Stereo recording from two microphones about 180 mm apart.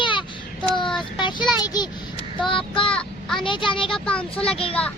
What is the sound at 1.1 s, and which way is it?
A child's voice, 25° left (ahead or behind).